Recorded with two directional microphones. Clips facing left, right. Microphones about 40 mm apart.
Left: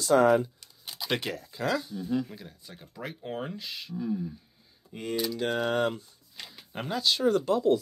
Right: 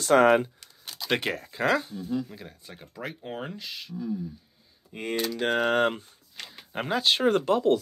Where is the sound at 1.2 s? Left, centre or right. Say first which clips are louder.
Right 5 dB; right; by 3.5 s centre.